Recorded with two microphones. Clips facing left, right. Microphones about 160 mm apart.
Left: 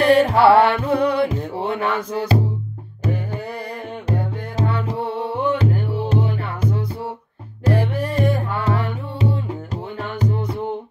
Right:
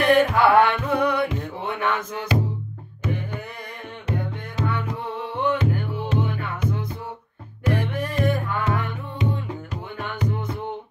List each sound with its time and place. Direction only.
0.0 s music: 30° left (ahead or behind)
4.1 s music: 30° left (ahead or behind)